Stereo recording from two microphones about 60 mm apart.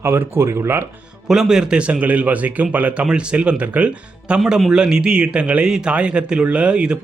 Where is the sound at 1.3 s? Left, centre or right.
Centre.